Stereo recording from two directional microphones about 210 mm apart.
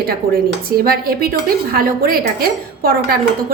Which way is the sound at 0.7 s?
45° right (ahead or behind).